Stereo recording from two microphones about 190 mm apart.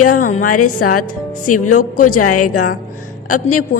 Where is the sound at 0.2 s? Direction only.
40° left (ahead or behind).